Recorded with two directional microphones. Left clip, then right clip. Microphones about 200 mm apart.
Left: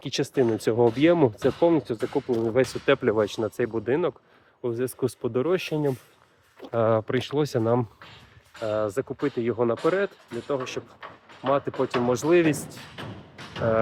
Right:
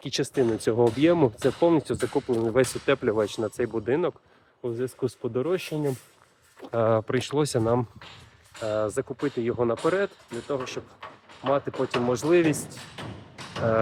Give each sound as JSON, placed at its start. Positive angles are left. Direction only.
{"t": 0.0, "sound": "speech", "side_deg": 10}
{"t": 1.4, "sound": "speech", "side_deg": 0}
{"t": 2.8, "sound": "speech", "side_deg": 15}
{"t": 4.6, "sound": "speech", "side_deg": 30}
{"t": 6.7, "sound": "speech", "side_deg": 10}